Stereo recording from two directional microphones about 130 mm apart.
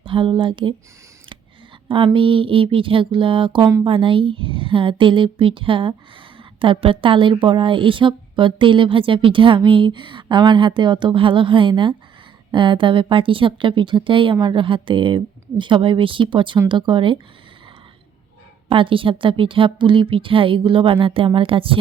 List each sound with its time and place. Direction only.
0.0 s speech: 40° right (ahead or behind)
2.1 s speech: 40° right (ahead or behind)
18.7 s a woman's voice: 40° right (ahead or behind)